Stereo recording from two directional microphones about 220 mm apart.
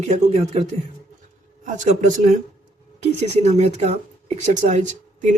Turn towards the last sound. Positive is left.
turn(degrees=-35)  # may be behind; listen again after turning